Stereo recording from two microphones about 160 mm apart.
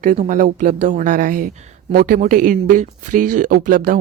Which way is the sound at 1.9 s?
70° right (ahead or behind).